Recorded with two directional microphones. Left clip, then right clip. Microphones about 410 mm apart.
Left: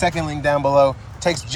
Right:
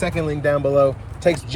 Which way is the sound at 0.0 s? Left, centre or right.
Centre.